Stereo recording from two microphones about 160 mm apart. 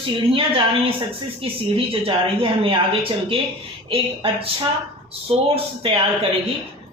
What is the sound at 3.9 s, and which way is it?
A woman's voice, 35° right (ahead or behind).